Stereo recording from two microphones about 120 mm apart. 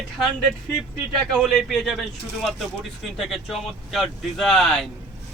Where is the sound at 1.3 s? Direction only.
Centre (ahead or behind).